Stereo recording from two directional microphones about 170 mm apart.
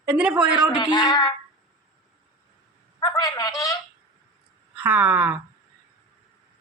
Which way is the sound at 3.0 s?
25° left (ahead or behind).